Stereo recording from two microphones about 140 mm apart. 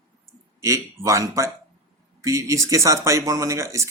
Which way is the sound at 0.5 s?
20° right (ahead or behind).